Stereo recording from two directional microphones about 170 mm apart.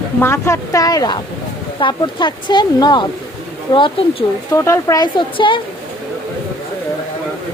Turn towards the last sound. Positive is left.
turn(degrees=30)  # may be behind; listen again after turning